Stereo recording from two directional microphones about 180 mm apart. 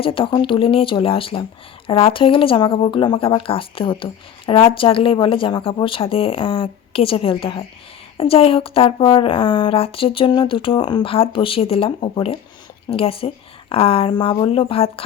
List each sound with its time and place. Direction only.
0.0 s a woman's voice: 30° left (ahead or behind)